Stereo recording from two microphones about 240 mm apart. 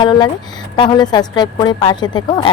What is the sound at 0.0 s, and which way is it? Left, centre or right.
A woman's voice, centre.